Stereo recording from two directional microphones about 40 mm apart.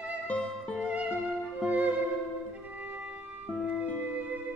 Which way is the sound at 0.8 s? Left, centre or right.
Right.